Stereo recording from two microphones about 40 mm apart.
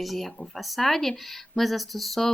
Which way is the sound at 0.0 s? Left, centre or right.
Centre.